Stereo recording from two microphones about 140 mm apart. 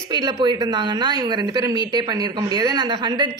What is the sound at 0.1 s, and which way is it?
A woman's voice, 30° right (ahead or behind).